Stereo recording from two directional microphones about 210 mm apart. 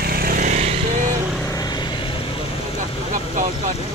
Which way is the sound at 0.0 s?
45° right (ahead or behind).